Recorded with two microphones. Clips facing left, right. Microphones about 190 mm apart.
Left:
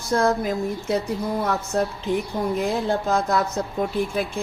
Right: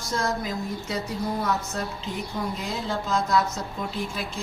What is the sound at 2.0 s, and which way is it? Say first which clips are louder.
A woman's voice: left 7 dB; 55° left (ahead or behind).